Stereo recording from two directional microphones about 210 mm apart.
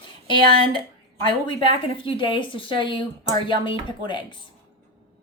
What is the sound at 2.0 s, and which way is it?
Speech, 25° left (ahead or behind).